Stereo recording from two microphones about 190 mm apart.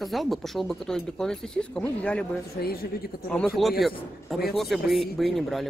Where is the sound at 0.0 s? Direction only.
Centre (ahead or behind).